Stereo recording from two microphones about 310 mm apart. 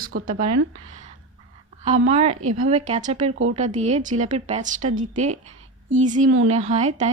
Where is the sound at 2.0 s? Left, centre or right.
Right.